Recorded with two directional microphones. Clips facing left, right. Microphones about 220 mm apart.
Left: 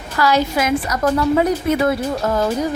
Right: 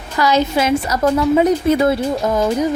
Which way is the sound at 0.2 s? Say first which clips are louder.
Right 2 dB; 20° right (ahead or behind).